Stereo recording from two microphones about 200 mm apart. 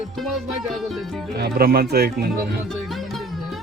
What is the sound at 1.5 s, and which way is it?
Speech, 50° right (ahead or behind).